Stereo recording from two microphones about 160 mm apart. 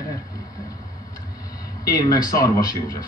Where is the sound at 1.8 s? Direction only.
25° left (ahead or behind).